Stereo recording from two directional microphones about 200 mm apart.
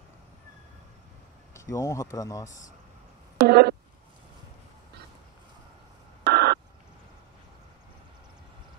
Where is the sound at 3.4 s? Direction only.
50° right (ahead or behind).